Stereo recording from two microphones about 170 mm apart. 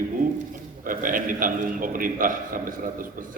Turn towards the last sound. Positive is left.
turn(degrees=-55)  # may be behind; listen again after turning